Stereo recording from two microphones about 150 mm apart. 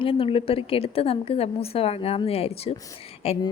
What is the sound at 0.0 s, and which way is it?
A woman's voice, 35° left (ahead or behind).